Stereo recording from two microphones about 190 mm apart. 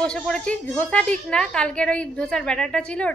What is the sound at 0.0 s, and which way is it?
A woman's voice, 5° left (ahead or behind).